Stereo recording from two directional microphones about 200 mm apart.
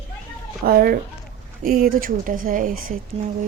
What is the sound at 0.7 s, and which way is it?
Speech, 50° right (ahead or behind).